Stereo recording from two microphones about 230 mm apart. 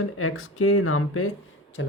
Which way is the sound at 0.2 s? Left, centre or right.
Left.